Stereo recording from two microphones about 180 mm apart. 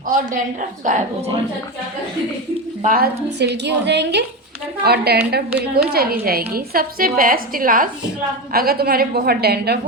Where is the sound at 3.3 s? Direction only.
70° right (ahead or behind).